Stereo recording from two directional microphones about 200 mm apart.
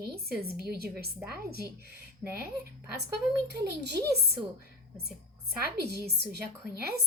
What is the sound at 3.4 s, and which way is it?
Speech, 55° right (ahead or behind).